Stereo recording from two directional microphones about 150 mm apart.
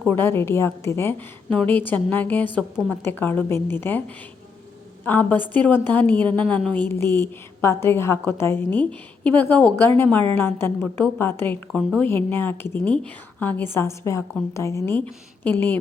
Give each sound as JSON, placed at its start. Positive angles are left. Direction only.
{"t": 0.1, "sound": "a woman's voice", "side_deg": 15}
{"t": 5.0, "sound": "a woman's voice", "side_deg": 10}